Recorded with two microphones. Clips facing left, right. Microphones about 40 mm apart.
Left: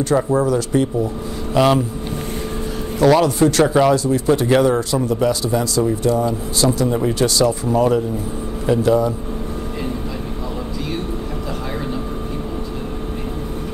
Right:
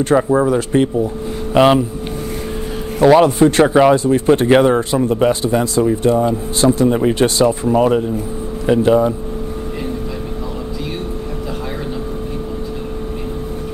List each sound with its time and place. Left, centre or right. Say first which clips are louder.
0.0 s speech: right 3 dB; right
3.0 s speech: right 4 dB; right